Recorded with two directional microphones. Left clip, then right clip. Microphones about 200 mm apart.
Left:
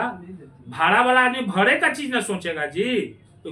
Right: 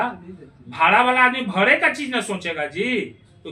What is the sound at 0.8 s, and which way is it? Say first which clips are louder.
Speech: right 2 dB; 10° left (ahead or behind).